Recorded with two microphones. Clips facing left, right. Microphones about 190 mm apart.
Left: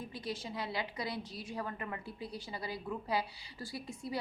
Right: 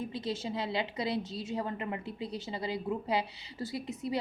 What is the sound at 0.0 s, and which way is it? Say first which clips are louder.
A woman's voice: right 6 dB; 25° right (ahead or behind).